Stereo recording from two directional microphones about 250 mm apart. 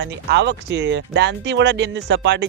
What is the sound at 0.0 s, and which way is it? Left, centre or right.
Speech, right.